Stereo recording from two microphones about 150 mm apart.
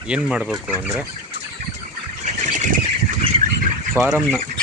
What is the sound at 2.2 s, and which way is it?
Bird flight, 55° right (ahead or behind).